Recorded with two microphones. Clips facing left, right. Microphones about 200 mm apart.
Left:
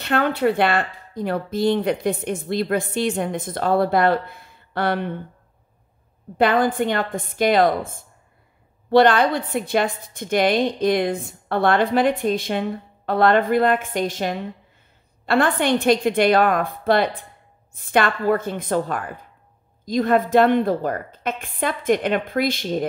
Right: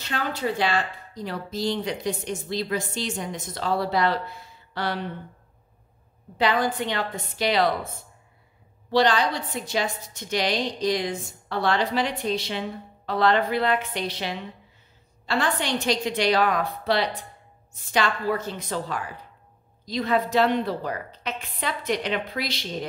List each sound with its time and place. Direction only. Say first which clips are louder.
0.0 s speech: left 9 dB; 60° left (ahead or behind)
6.3 s a woman's voice: left 5 dB; 50° left (ahead or behind)